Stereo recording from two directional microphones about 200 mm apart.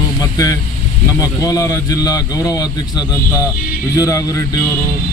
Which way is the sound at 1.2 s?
20° left (ahead or behind).